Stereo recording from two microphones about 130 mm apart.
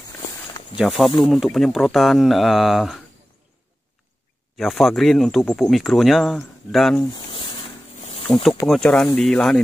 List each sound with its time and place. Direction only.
0.7 s speech: centre (ahead or behind)
4.6 s speech: centre (ahead or behind)
7.2 s a sound: 40° left (ahead or behind)
8.0 s snake: 50° left (ahead or behind)
8.6 s speech: 5° left (ahead or behind)